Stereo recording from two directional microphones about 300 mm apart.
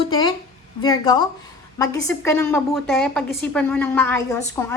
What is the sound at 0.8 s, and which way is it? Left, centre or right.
A woman's voice, centre.